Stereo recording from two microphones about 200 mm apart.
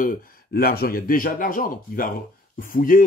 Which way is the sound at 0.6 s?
50° left (ahead or behind).